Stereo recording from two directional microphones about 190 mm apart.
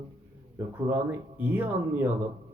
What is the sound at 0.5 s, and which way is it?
Speech, 10° right (ahead or behind).